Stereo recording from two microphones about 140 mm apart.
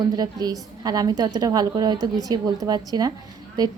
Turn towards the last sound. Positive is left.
turn(degrees=-30)  # may be behind; listen again after turning